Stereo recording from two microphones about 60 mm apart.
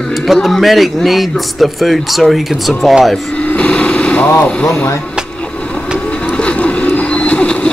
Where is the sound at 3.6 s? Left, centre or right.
Centre.